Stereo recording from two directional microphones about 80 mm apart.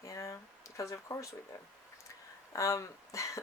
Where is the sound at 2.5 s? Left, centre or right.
Left.